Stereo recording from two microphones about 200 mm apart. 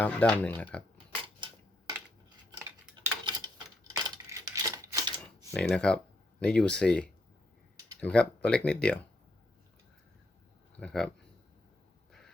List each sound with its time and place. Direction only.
0.0 s speech: 5° left (ahead or behind)
2.5 s a sound: 20° right (ahead or behind)
5.5 s speech: 5° left (ahead or behind)
10.8 s speech: 5° left (ahead or behind)